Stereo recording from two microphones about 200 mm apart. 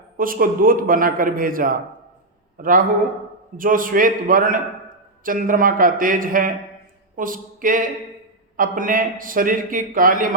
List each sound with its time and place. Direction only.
0.2 s a man's voice: 45° right (ahead or behind)